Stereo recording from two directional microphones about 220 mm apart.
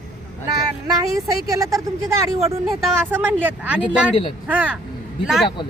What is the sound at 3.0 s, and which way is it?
Speech, 10° right (ahead or behind).